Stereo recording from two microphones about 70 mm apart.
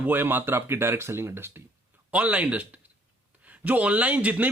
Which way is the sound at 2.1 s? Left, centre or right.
Right.